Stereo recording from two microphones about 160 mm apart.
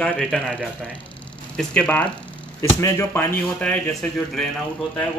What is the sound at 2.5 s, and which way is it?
Speech, 20° left (ahead or behind).